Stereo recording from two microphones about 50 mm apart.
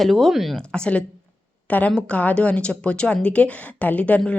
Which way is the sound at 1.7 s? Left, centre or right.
Left.